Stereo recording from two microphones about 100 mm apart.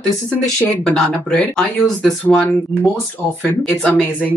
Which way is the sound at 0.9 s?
5° left (ahead or behind).